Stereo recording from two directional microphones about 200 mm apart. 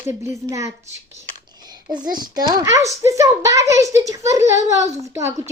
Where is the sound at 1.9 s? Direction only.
20° right (ahead or behind).